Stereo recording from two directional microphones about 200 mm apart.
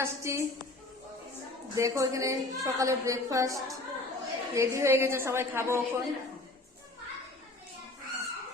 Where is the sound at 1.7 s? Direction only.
15° right (ahead or behind).